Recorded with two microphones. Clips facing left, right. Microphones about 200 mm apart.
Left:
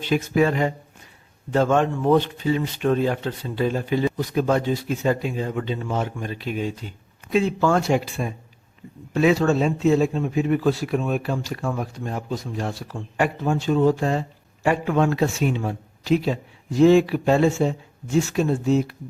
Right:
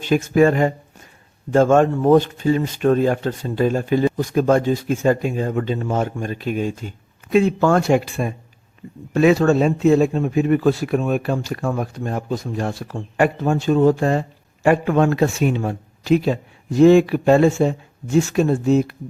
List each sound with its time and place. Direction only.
0.0 s speech: 45° right (ahead or behind)